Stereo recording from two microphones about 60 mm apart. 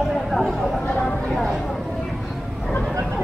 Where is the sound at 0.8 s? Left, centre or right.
Centre.